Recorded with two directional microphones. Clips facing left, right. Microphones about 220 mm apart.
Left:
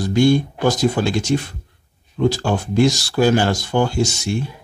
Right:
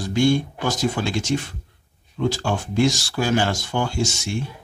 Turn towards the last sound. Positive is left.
turn(degrees=35)  # may be behind; listen again after turning